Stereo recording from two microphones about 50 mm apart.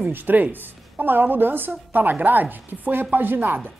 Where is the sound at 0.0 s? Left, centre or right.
Right.